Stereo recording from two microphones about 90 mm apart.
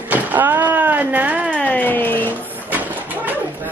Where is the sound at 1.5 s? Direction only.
20° left (ahead or behind).